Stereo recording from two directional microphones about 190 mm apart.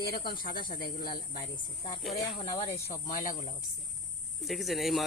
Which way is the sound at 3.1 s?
45° left (ahead or behind).